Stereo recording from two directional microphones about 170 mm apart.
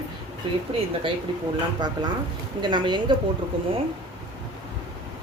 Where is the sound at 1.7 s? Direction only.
25° right (ahead or behind).